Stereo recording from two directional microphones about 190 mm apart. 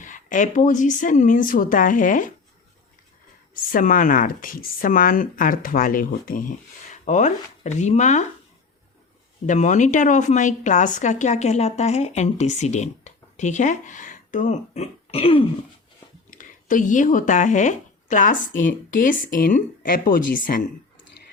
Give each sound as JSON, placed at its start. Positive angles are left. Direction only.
{"t": 0.0, "sound": "speech", "side_deg": 40}
{"t": 3.5, "sound": "a woman's voice", "side_deg": 45}
{"t": 9.5, "sound": "a woman's voice", "side_deg": 40}
{"t": 16.3, "sound": "speech", "side_deg": 45}